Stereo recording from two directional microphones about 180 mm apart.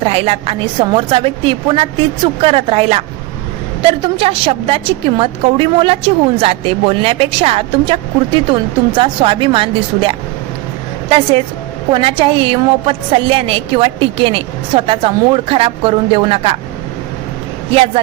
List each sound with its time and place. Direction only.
0.0 s a woman's voice: 35° right (ahead or behind)
4.0 s a woman's voice: 30° right (ahead or behind)